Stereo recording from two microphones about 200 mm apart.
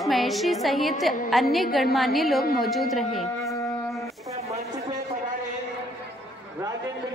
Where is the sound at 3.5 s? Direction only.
15° left (ahead or behind).